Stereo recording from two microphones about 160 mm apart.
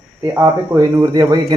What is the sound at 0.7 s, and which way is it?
Speech, 20° right (ahead or behind).